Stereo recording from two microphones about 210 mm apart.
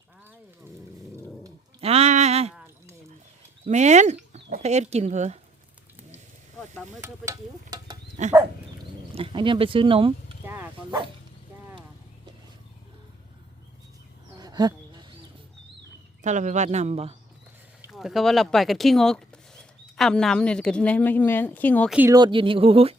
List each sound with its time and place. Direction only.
1.8 s a sound: 30° right (ahead or behind)
3.7 s speech: 35° right (ahead or behind)
7.0 s speech: 15° right (ahead or behind)
8.2 s speech: 35° right (ahead or behind)
9.1 s speech: 25° right (ahead or behind)
10.4 s bow-wow: 10° right (ahead or behind)
14.3 s a sound: 20° right (ahead or behind)
16.2 s speech: 35° right (ahead or behind)
17.9 s speech: centre (ahead or behind)
21.9 s speech: 15° right (ahead or behind)